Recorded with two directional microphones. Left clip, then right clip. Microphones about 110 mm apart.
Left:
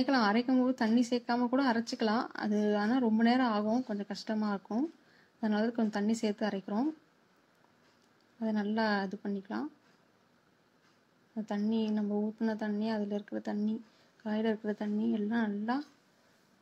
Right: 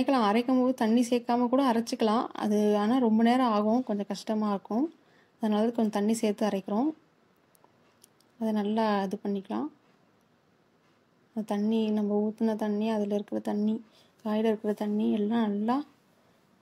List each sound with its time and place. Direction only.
0.0 s speech: 50° right (ahead or behind)
8.4 s speech: 45° right (ahead or behind)
11.3 s a woman's voice: 45° right (ahead or behind)
12.4 s speech: 45° right (ahead or behind)